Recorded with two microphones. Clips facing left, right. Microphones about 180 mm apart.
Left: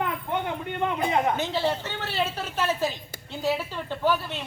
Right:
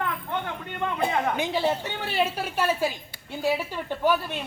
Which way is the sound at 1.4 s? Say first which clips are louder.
Right 1 dB; 15° right (ahead or behind).